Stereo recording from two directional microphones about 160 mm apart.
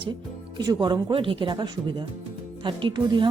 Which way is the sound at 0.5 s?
25° right (ahead or behind).